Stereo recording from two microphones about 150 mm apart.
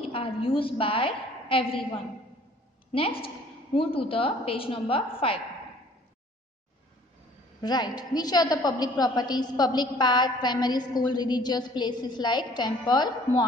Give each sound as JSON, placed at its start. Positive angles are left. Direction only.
{"t": 0.1, "sound": "a woman's voice", "side_deg": 35}
{"t": 7.6, "sound": "a woman's voice", "side_deg": 25}